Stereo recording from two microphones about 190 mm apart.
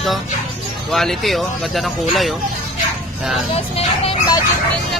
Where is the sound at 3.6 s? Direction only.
30° left (ahead or behind).